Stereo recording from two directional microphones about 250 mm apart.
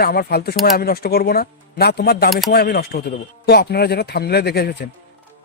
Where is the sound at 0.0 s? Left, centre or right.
Left.